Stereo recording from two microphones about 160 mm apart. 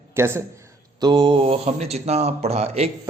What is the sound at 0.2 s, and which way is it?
Speech, 15° right (ahead or behind).